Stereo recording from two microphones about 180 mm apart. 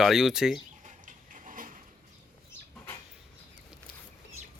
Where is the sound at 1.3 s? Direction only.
45° right (ahead or behind).